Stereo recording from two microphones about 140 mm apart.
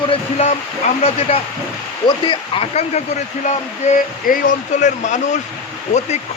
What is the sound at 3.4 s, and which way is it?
Speech, 65° left (ahead or behind).